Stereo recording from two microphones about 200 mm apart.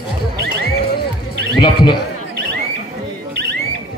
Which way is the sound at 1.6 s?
25° left (ahead or behind).